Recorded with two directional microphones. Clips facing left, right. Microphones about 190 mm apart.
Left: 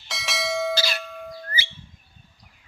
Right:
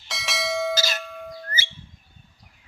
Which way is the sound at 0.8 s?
45° right (ahead or behind).